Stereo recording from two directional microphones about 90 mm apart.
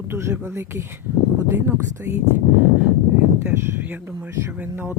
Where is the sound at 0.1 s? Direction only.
30° right (ahead or behind).